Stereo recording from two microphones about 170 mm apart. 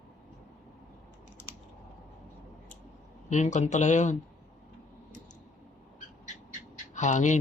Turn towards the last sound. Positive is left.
turn(degrees=45)  # may be behind; listen again after turning